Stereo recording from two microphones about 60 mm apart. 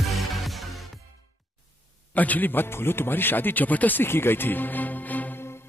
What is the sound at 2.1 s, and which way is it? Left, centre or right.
A man's voice, left.